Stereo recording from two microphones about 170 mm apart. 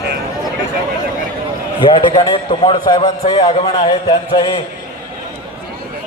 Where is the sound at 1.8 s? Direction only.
25° left (ahead or behind).